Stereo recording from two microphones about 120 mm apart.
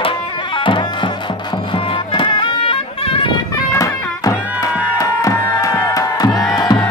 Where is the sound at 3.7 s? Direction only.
30° left (ahead or behind).